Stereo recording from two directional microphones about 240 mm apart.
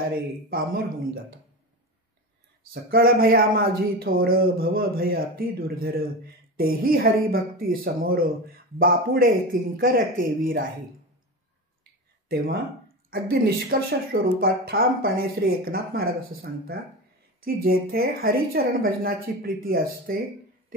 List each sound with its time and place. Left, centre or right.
0.1 s speech: right
2.7 s speech: right
13.1 s speech: right